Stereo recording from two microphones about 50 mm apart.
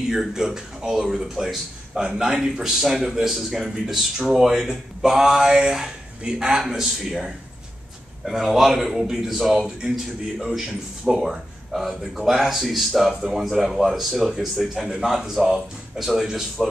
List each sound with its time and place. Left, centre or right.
0.1 s a man's voice: centre
11.1 s a man's voice: centre